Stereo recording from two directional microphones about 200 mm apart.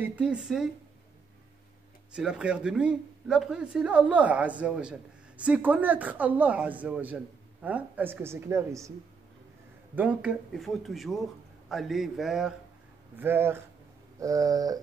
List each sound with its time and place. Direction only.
0.0 s speech: 5° right (ahead or behind)
2.1 s speech: 5° right (ahead or behind)
9.9 s speech: 5° right (ahead or behind)